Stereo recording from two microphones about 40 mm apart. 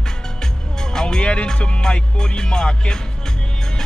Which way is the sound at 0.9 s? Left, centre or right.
Left.